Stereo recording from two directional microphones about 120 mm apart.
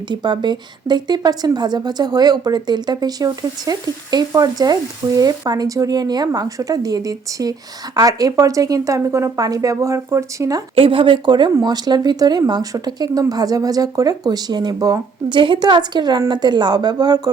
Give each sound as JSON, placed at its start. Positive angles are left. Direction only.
{"t": 0.1, "sound": "a woman's voice", "side_deg": -40}
{"t": 10.8, "sound": "a woman's voice", "side_deg": -50}